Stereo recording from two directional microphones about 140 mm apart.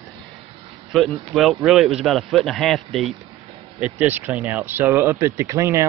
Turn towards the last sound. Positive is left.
turn(degrees=-20)  # may be behind; listen again after turning